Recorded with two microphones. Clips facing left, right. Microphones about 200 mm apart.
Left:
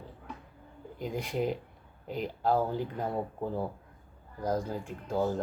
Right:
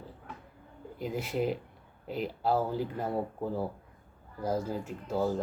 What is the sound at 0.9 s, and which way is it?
Speech, 5° right (ahead or behind).